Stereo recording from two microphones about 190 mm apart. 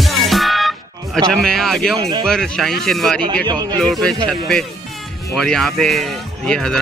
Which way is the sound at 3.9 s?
Centre (ahead or behind).